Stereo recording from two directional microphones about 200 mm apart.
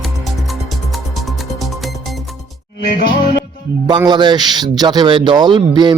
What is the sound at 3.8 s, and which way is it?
A man's voice, 20° right (ahead or behind).